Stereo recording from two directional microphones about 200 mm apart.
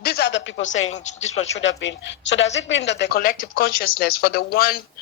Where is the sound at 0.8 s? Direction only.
35° left (ahead or behind).